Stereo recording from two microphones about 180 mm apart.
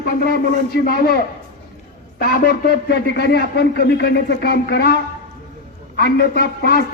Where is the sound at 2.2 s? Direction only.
55° left (ahead or behind).